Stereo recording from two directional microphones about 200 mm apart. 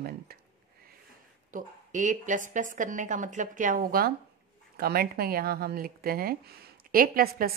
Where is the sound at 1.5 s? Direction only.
40° right (ahead or behind).